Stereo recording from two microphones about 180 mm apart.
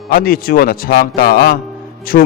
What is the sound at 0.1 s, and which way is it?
A man's voice, 55° left (ahead or behind).